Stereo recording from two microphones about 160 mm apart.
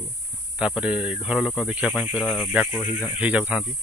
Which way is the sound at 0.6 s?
5° right (ahead or behind).